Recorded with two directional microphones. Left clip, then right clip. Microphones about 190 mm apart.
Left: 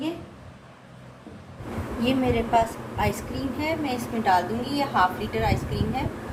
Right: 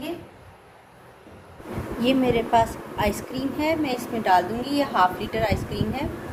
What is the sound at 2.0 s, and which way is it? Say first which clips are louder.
A woman's voice: right 3 dB; 45° right (ahead or behind).